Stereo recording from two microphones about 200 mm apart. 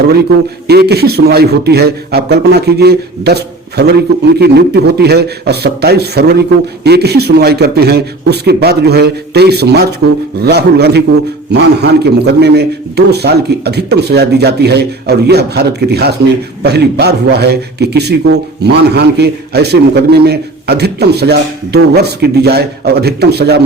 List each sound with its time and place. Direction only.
0.7 s a man's voice: 55° right (ahead or behind)